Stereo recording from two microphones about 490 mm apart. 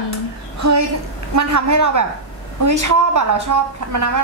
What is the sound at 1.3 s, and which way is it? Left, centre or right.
A woman's voice, right.